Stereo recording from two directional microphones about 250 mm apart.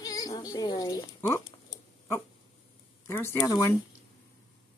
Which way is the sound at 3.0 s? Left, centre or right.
Centre.